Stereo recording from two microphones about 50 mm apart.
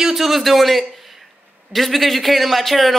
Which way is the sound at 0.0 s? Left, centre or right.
Centre.